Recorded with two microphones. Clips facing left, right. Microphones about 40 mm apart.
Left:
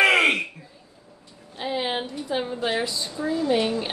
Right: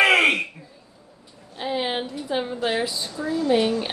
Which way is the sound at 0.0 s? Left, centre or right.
Centre.